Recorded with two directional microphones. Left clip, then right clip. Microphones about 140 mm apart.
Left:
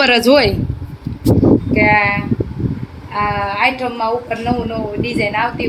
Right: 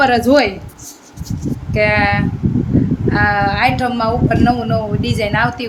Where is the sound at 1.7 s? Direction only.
15° right (ahead or behind).